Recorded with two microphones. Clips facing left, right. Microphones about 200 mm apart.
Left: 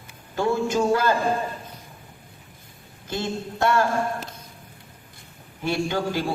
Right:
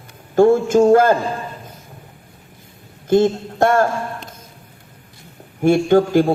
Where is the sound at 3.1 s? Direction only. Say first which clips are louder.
Right 14 dB; 50° right (ahead or behind).